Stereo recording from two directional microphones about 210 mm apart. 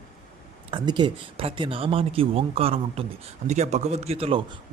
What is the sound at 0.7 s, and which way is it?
Speech, 20° right (ahead or behind).